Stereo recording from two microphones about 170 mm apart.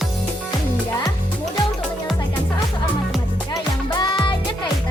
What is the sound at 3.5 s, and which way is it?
Music, 25° left (ahead or behind).